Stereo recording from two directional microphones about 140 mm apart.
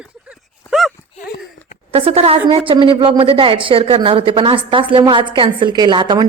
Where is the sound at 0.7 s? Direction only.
Centre (ahead or behind).